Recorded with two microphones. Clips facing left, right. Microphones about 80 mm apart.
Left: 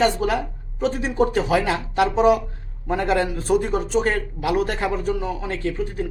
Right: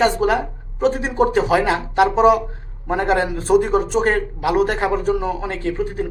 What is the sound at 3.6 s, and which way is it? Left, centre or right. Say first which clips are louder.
Speech: right 4 dB; right.